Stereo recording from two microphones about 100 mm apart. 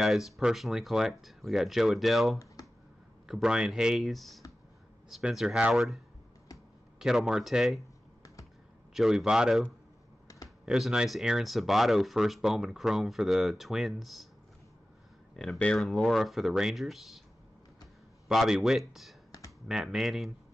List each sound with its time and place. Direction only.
0.0 s speech: centre (ahead or behind)
2.6 s finger snapping: 40° left (ahead or behind)
3.3 s speech: 5° right (ahead or behind)
7.0 s speech: 5° right (ahead or behind)
8.9 s speech: 5° right (ahead or behind)
15.3 s speech: 5° left (ahead or behind)
18.3 s speech: centre (ahead or behind)